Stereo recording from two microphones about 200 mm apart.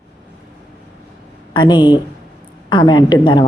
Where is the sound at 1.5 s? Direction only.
20° left (ahead or behind).